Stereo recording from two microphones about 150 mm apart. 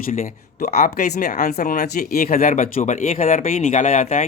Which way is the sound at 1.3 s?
70° left (ahead or behind).